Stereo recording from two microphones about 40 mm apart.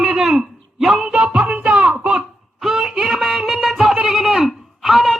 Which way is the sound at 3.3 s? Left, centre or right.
Centre.